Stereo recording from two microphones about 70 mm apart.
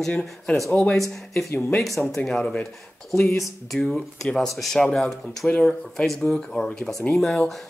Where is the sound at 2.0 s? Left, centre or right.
Centre.